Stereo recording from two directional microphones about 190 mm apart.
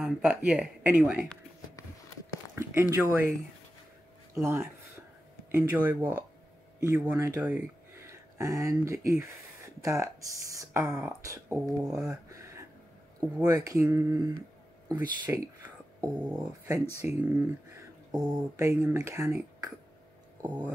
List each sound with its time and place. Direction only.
0.0 s speech: 5° right (ahead or behind)
2.5 s speech: 15° right (ahead or behind)
12.3 s a sound: 15° right (ahead or behind)
13.5 s speech: 20° right (ahead or behind)
15.6 s a sound: 5° right (ahead or behind)
16.3 s speech: 15° right (ahead or behind)